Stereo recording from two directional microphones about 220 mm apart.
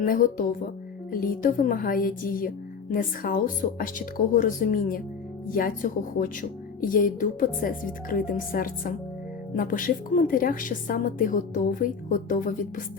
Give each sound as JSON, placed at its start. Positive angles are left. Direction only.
{"t": 0.0, "sound": "a woman's voice", "side_deg": 40}